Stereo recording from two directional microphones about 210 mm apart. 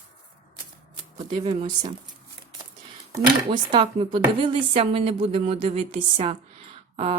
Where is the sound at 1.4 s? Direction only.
25° right (ahead or behind).